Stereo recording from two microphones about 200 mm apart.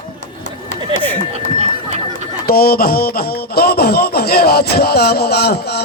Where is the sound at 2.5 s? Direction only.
50° left (ahead or behind).